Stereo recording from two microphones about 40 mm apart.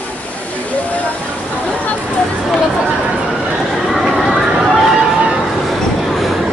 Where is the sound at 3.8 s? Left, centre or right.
Centre.